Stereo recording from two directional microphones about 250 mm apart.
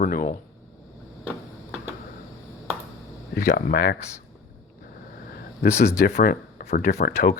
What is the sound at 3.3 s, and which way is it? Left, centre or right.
Speech, left.